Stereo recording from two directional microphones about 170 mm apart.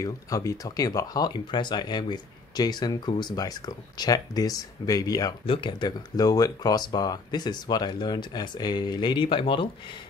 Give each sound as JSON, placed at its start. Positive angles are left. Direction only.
{"t": 0.0, "sound": "speech", "side_deg": 20}